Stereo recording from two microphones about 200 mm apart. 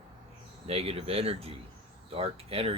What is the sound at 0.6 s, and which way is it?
Speech, 30° right (ahead or behind).